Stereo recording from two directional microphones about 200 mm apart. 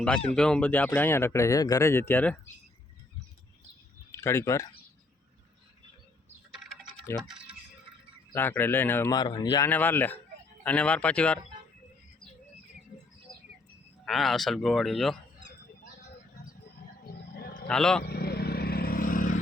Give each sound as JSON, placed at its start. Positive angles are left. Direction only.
{"t": 0.3, "sound": "speech", "side_deg": 5}
{"t": 4.2, "sound": "speech", "side_deg": 15}
{"t": 7.1, "sound": "speech", "side_deg": 0}
{"t": 9.6, "sound": "speech", "side_deg": 10}
{"t": 14.0, "sound": "speech", "side_deg": 0}
{"t": 17.0, "sound": "roaring cats", "side_deg": 50}
{"t": 17.7, "sound": "speech", "side_deg": 5}
{"t": 18.0, "sound": "vehicle", "side_deg": 50}